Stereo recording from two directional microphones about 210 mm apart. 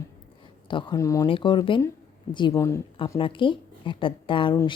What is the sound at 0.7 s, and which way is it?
A woman's voice, 20° left (ahead or behind).